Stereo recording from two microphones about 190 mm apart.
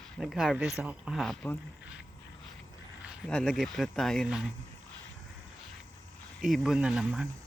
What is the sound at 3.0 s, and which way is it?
Speech, centre (ahead or behind).